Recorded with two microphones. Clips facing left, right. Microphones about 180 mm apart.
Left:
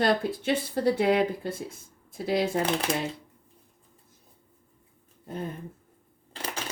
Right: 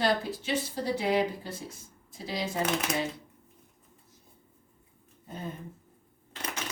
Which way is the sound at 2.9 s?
30° left (ahead or behind).